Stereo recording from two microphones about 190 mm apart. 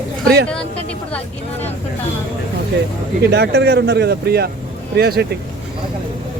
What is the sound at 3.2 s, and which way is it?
A man's voice, 60° right (ahead or behind).